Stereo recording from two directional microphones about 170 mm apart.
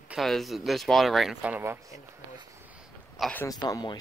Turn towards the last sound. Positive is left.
turn(degrees=25)  # may be behind; listen again after turning